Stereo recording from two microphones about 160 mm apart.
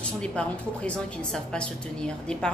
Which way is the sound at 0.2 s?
5° left (ahead or behind).